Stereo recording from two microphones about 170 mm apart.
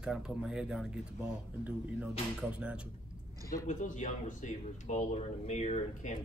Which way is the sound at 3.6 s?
50° left (ahead or behind).